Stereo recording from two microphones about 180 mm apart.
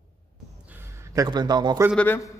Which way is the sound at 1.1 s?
20° right (ahead or behind).